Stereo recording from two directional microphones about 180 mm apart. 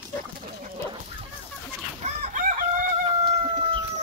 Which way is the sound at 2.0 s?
40° right (ahead or behind).